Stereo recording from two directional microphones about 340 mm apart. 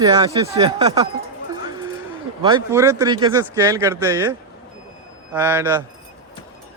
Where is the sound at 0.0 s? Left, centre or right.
Centre.